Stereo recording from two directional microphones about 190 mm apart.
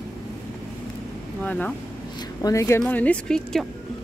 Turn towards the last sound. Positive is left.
turn(degrees=5)  # may be behind; listen again after turning